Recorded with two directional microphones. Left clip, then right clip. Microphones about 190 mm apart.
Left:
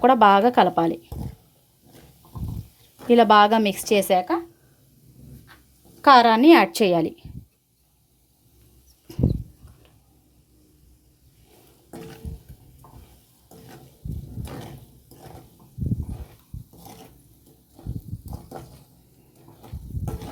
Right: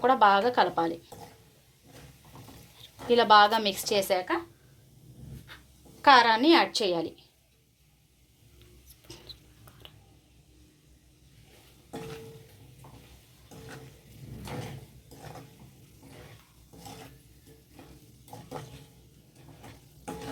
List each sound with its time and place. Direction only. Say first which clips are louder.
0.0 s a woman's voice: left 7 dB; 55° left (ahead or behind)
3.1 s a woman's voice: left 5 dB; 50° left (ahead or behind)
6.0 s a woman's voice: left 6 dB; 60° left (ahead or behind)
9.1 s a sound: left 16 dB; 55° left (ahead or behind)